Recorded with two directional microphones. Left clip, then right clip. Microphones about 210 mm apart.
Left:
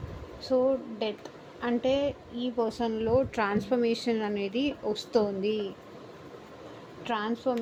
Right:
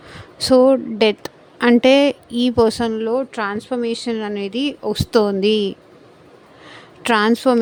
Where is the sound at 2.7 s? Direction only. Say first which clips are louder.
Right 8 dB; 40° right (ahead or behind).